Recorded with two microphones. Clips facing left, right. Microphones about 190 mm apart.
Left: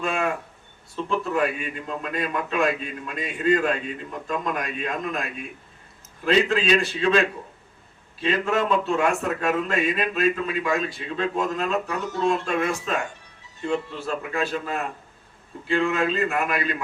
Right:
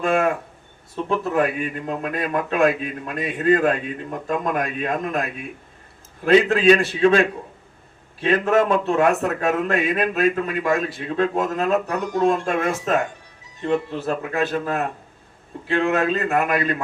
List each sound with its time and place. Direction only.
0.0 s a sound: 50° right (ahead or behind)
1.0 s a man's voice: 50° right (ahead or behind)
6.2 s a man's voice: 50° right (ahead or behind)
14.0 s a man's voice: 50° right (ahead or behind)